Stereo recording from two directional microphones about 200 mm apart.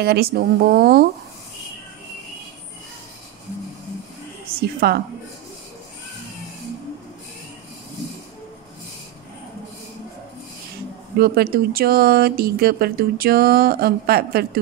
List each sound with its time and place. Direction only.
0.0 s speech: 50° right (ahead or behind)
4.6 s speech: 50° right (ahead or behind)
11.1 s speech: 50° right (ahead or behind)